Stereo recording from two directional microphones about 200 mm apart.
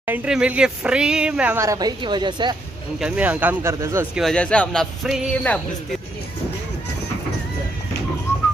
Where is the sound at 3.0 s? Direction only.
5° right (ahead or behind).